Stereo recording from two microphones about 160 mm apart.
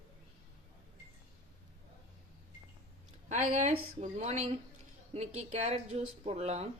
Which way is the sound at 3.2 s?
50° right (ahead or behind).